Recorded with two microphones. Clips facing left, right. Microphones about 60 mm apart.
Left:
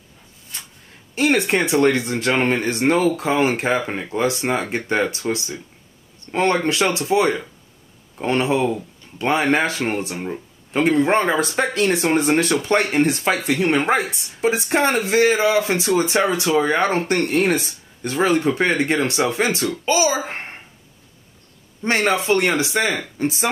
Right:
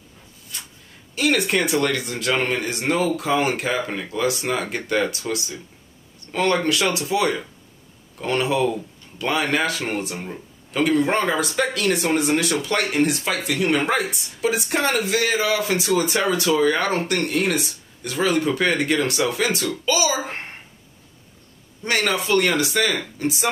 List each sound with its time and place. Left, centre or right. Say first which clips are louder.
1.1 s speech: left 2 dB; left
21.8 s speech: left 4 dB; left